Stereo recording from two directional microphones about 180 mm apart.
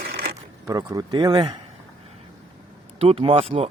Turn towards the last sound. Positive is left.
turn(degrees=-35)  # may be behind; listen again after turning